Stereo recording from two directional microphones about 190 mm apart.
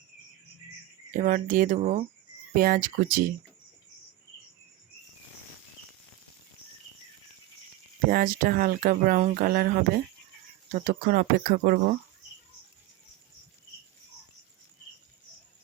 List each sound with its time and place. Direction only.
1.1 s speech: 45° right (ahead or behind)
2.6 s speech: 50° right (ahead or behind)
8.1 s speech: 50° right (ahead or behind)